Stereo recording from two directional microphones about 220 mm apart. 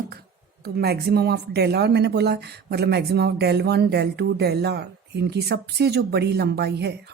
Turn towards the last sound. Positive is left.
turn(degrees=-50)  # may be behind; listen again after turning